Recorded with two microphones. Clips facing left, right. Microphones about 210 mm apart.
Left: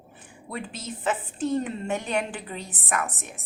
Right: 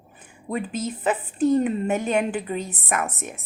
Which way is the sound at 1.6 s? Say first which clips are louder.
Right 6 dB; 20° right (ahead or behind).